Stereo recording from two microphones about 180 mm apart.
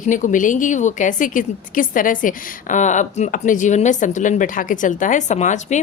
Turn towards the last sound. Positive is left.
turn(degrees=40)  # may be behind; listen again after turning